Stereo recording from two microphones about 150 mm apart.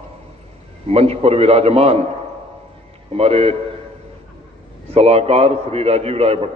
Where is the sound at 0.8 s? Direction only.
45° right (ahead or behind).